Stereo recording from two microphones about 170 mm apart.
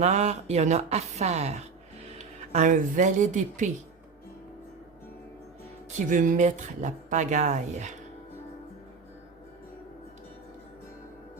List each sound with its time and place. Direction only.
0.0 s speech: 40° right (ahead or behind)
6.1 s speech: 45° right (ahead or behind)